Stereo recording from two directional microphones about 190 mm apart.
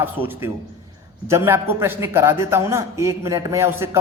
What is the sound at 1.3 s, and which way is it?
A man's voice, 15° right (ahead or behind).